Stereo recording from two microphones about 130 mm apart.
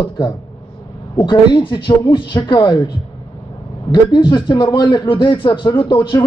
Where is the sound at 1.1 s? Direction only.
35° left (ahead or behind).